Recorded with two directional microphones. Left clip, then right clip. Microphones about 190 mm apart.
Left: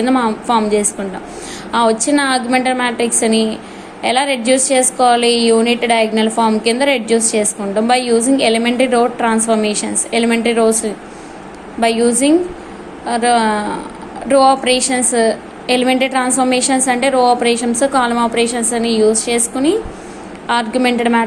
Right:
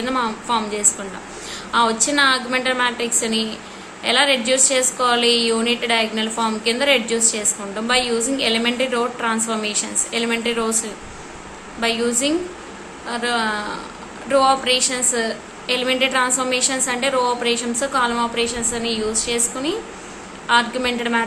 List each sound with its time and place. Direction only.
0.0 s a woman's voice: 20° left (ahead or behind)